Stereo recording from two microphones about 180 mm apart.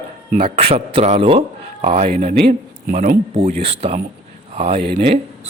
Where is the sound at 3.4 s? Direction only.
35° right (ahead or behind).